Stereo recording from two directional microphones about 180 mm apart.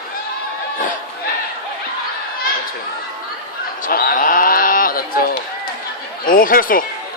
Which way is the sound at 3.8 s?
55° left (ahead or behind).